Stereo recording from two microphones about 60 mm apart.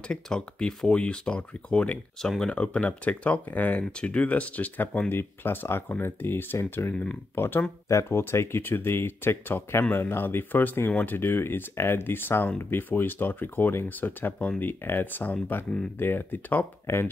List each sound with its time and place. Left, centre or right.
0.1 s speech: centre
2.2 s speech: centre
2.5 s speech: left
5.1 s speech: left
7.9 s speech: left
8.2 s speech: left
11.1 s speech: left
16.8 s speech: left